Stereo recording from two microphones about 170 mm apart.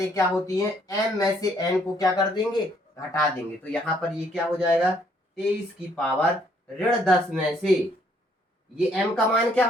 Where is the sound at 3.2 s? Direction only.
5° left (ahead or behind).